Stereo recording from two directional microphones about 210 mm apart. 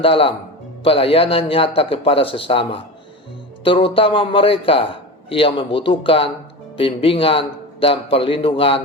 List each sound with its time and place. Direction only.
0.0 s a man's voice: 25° left (ahead or behind)